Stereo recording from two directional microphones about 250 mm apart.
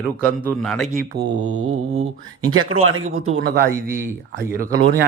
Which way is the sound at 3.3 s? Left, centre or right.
Right.